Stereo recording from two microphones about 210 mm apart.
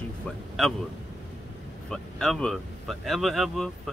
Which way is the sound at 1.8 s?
Centre (ahead or behind).